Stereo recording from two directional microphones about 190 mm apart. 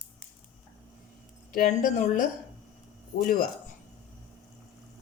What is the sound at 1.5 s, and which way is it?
Speech, 45° left (ahead or behind).